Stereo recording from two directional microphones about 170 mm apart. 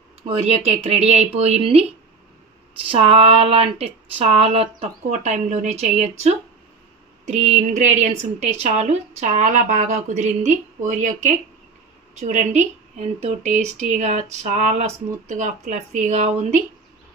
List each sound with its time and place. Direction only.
0.2 s speech: 35° right (ahead or behind)
2.9 s a woman's voice: 35° right (ahead or behind)